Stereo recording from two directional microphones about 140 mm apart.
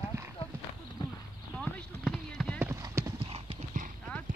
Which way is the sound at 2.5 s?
20° right (ahead or behind).